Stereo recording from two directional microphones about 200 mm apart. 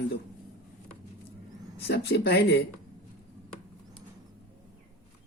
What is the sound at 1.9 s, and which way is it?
Speech, 55° left (ahead or behind).